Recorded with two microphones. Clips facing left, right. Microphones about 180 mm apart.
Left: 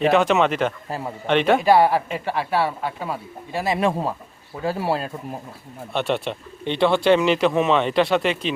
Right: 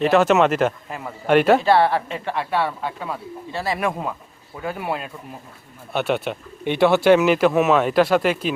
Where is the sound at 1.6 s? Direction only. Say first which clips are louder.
Left 1 dB; 10° left (ahead or behind).